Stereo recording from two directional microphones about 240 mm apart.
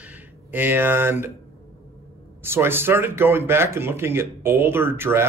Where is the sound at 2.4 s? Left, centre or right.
Centre.